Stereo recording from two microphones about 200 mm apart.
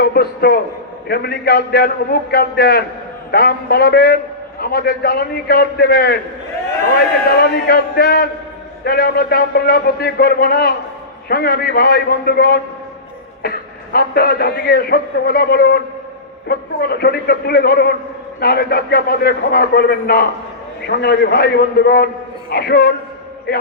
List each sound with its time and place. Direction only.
0.0 s a man's voice: 50° left (ahead or behind)
7.3 s a man's voice: 50° left (ahead or behind)